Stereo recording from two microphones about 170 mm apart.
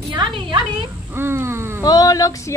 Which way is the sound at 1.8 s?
20° left (ahead or behind).